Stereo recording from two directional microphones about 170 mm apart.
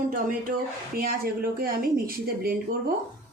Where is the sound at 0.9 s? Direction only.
60° right (ahead or behind).